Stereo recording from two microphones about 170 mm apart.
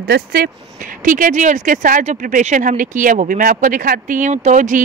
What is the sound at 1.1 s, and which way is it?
Speech, 50° right (ahead or behind).